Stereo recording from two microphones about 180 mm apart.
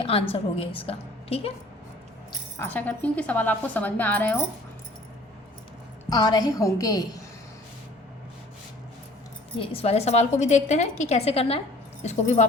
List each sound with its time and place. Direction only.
0.0 s a sound: 30° left (ahead or behind)
0.8 s a woman's voice: 30° left (ahead or behind)
2.6 s speech: 10° left (ahead or behind)
6.1 s a woman's voice: 20° left (ahead or behind)
9.6 s a woman's voice: 35° left (ahead or behind)